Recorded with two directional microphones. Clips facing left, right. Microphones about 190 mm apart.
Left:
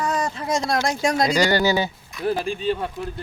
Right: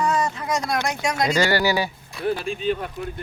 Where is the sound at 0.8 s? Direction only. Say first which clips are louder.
Left 3 dB; 35° left (ahead or behind).